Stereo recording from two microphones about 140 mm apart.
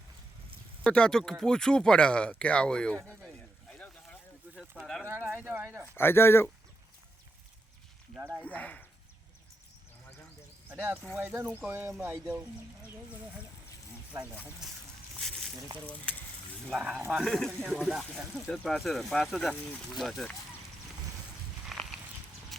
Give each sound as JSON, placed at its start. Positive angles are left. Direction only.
{"t": 0.9, "sound": "speech", "side_deg": 5}
{"t": 3.1, "sound": "a sound", "side_deg": 5}
{"t": 4.5, "sound": "a sound", "side_deg": -15}
{"t": 5.0, "sound": "speech", "side_deg": -15}
{"t": 5.9, "sound": "speech", "side_deg": 15}
{"t": 8.4, "sound": "speech", "side_deg": 10}
{"t": 10.7, "sound": "speech", "side_deg": -15}
{"t": 14.6, "sound": "speech", "side_deg": -5}
{"t": 15.2, "sound": "a sound", "side_deg": 0}
{"t": 16.8, "sound": "speech", "side_deg": -5}
{"t": 21.7, "sound": "walk", "side_deg": 0}